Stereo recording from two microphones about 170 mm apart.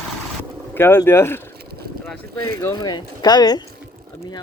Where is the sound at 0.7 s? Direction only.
15° left (ahead or behind).